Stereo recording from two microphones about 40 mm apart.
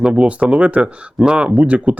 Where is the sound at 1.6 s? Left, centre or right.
Right.